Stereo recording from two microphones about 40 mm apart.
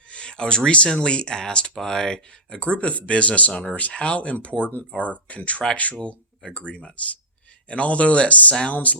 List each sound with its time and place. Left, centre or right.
0.1 s a sound: left
1.0 s speech: left
2.6 s speech: left